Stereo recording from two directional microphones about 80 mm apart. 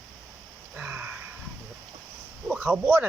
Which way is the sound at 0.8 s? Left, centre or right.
Right.